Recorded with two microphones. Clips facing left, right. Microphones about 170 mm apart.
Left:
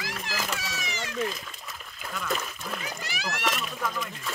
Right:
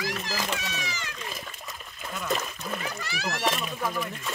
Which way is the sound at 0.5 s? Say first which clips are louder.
Right 2 dB; 25° right (ahead or behind).